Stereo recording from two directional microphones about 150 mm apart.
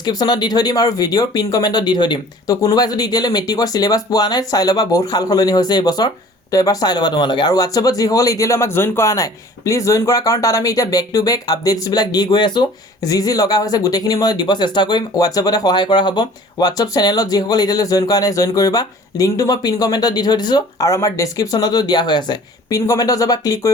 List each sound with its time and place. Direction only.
0.0 s speech: 25° left (ahead or behind)